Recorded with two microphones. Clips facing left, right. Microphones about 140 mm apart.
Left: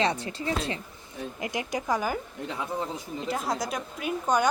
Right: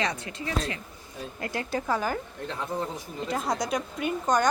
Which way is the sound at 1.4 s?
15° left (ahead or behind).